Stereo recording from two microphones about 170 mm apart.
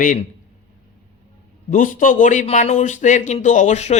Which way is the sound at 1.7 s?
50° left (ahead or behind).